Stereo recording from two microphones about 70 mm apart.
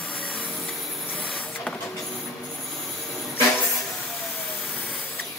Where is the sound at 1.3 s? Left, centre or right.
Centre.